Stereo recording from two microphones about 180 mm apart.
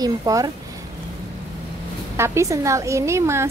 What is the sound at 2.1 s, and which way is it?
A woman's voice, 15° right (ahead or behind).